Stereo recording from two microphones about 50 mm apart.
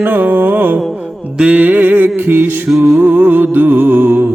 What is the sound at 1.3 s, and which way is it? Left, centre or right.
Music, right.